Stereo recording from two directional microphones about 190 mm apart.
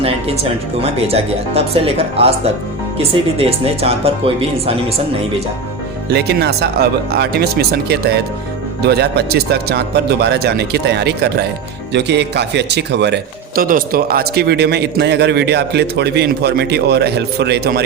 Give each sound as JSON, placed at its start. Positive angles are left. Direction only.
{"t": 0.8, "sound": "speech", "side_deg": -30}
{"t": 6.1, "sound": "a man's voice", "side_deg": -60}
{"t": 13.6, "sound": "a man's voice", "side_deg": -50}